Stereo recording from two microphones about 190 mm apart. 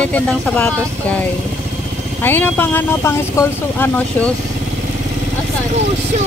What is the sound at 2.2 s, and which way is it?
Speech, 10° left (ahead or behind).